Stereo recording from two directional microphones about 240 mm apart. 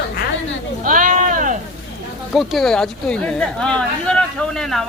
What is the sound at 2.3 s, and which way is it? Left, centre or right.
Speech, centre.